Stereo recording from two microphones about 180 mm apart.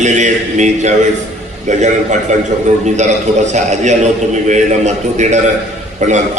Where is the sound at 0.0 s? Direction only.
40° right (ahead or behind).